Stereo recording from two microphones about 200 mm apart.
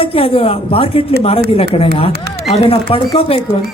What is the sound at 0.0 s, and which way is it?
A woman's voice, 30° left (ahead or behind).